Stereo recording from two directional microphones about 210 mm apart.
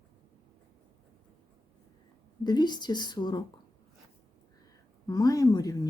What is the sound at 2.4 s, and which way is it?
Speech, 20° left (ahead or behind).